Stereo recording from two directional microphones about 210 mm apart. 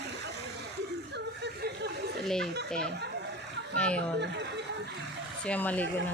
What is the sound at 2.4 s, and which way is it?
Speech, 50° right (ahead or behind).